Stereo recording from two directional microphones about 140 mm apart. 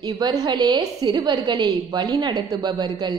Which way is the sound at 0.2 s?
30° right (ahead or behind).